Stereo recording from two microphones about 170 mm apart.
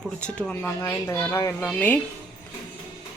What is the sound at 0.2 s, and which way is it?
Speech, 5° left (ahead or behind).